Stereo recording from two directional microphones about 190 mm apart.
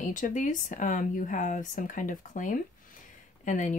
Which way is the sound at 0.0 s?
45° left (ahead or behind).